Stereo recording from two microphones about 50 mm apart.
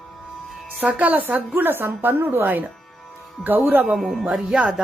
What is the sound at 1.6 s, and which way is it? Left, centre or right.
A woman's voice, right.